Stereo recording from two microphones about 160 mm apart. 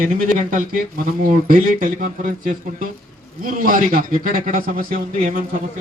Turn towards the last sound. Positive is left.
turn(degrees=-60)  # may be behind; listen again after turning